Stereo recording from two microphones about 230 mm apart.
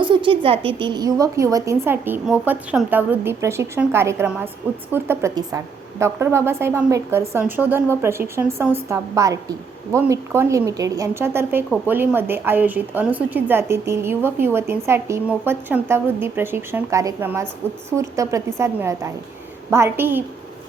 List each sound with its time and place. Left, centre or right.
0.0 s a woman's voice: right